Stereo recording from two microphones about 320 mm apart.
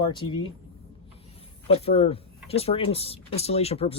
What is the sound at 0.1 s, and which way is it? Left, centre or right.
Speech, centre.